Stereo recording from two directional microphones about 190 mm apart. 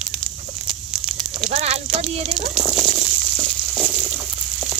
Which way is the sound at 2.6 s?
Centre (ahead or behind).